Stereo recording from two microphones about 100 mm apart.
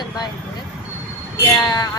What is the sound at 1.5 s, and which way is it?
Speech, 35° left (ahead or behind).